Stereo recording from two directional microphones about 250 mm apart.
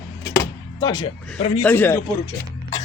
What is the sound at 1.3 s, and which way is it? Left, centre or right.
Speech, centre.